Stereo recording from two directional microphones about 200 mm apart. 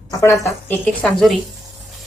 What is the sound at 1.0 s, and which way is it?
Speech, 5° left (ahead or behind).